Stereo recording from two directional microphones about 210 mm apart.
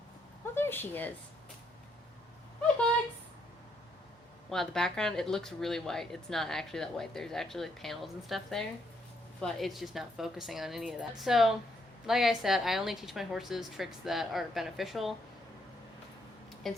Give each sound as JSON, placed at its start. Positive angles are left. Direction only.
{"t": 0.5, "sound": "speech", "side_deg": 10}
{"t": 4.4, "sound": "speech", "side_deg": 0}
{"t": 16.7, "sound": "speech", "side_deg": 0}